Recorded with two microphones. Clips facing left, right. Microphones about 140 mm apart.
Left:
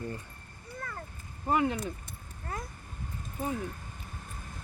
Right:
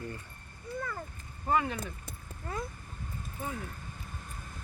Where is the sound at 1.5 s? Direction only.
20° left (ahead or behind).